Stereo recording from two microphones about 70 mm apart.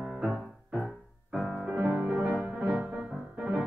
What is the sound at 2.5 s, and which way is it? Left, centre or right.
Music, centre.